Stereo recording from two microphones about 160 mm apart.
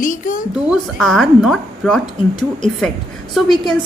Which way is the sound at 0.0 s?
55° left (ahead or behind).